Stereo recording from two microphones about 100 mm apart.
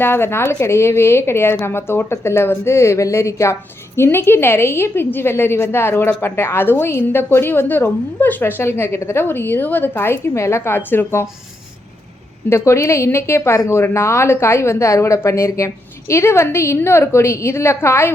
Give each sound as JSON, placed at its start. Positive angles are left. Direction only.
{"t": 0.0, "sound": "a woman's voice", "side_deg": 20}
{"t": 12.5, "sound": "a woman's voice", "side_deg": 30}